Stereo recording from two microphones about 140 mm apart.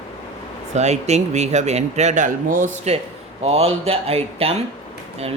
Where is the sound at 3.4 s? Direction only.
45° right (ahead or behind).